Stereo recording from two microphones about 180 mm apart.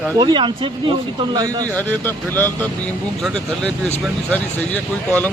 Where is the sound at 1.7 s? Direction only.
10° left (ahead or behind).